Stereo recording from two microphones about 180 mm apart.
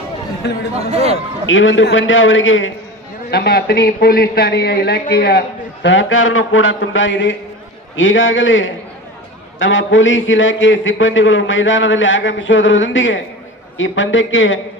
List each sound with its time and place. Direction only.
0.4 s speech: 65° left (ahead or behind)
0.8 s a man's voice: 35° right (ahead or behind)
1.1 s a man's voice: 90° left
3.3 s a man's voice: 65° left (ahead or behind); by 14.6 s 90° left